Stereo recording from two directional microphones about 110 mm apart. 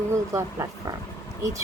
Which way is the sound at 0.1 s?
30° right (ahead or behind).